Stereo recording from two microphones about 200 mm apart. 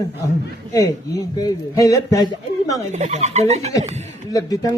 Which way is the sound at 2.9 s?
35° right (ahead or behind).